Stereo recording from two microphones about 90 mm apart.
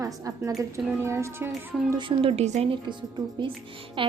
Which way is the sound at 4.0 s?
75° right (ahead or behind).